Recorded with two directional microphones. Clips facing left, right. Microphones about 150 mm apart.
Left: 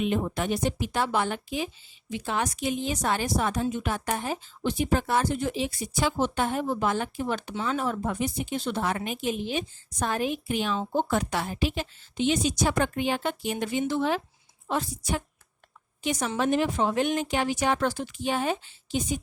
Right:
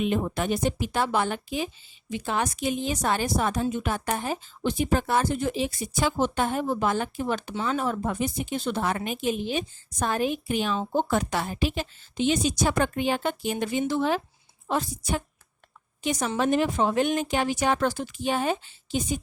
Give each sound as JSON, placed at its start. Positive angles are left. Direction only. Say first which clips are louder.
{"t": 0.0, "sound": "speech", "louder": "right 1 dB", "side_deg": -45}